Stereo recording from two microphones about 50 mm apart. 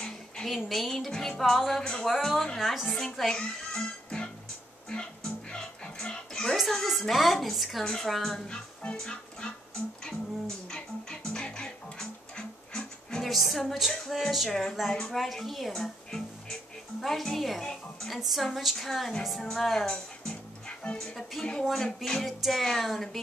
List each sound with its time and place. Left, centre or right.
0.5 s speech: centre
3.3 s music: centre
6.5 s speech: centre
7.8 s speech: centre
8.9 s music: centre
13.2 s speech: centre
19.9 s music: centre
20.8 s speech: left
21.1 s speech: centre